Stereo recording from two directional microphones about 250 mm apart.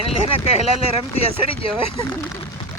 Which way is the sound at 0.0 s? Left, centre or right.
Left.